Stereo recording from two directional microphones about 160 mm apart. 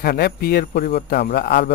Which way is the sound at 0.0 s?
75° left (ahead or behind).